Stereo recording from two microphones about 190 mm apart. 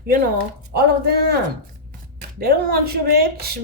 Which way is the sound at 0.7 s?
60° right (ahead or behind).